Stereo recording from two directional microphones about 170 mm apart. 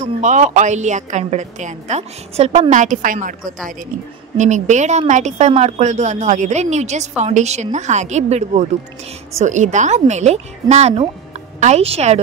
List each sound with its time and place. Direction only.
0.0 s a woman's voice: 45° right (ahead or behind)